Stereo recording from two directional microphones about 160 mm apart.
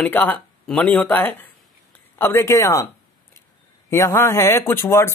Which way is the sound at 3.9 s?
20° left (ahead or behind).